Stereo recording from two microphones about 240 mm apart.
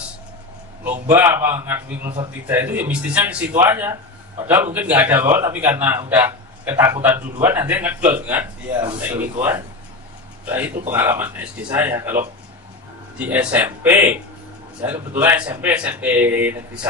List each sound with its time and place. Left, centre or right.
0.8 s a man's voice: centre
10.9 s a man's voice: centre
13.2 s a man's voice: centre